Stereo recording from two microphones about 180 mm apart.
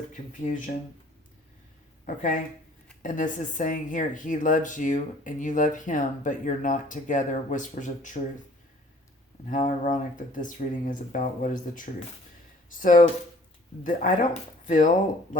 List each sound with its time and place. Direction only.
0.1 s speech: 45° left (ahead or behind)
2.0 s speech: 45° left (ahead or behind)
9.5 s speech: 45° left (ahead or behind)